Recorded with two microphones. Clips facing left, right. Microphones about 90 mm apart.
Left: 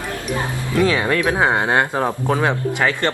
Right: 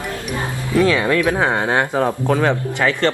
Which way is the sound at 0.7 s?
20° left (ahead or behind).